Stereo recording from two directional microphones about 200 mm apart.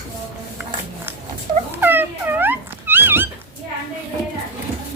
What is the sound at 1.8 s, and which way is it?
Dog, 10° right (ahead or behind).